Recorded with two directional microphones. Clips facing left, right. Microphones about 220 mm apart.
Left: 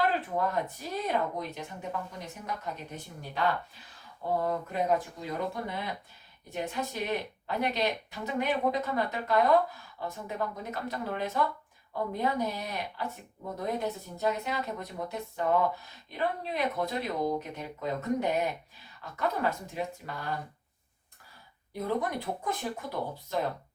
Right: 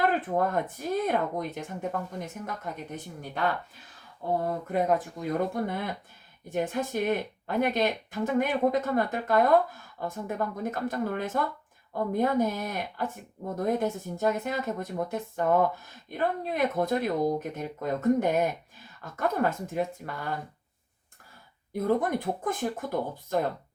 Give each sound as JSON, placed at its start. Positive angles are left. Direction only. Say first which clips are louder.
{"t": 0.0, "sound": "speech", "louder": "right 3 dB", "side_deg": -50}
{"t": 4.7, "sound": "speech", "louder": "right 6 dB", "side_deg": -50}
{"t": 21.7, "sound": "speech", "louder": "right 5 dB", "side_deg": -50}